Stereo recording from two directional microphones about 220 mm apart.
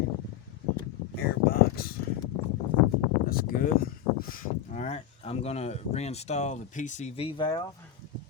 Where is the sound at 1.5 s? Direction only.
45° left (ahead or behind).